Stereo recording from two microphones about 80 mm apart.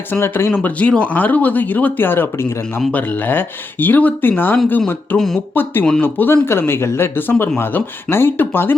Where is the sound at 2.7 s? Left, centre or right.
Left.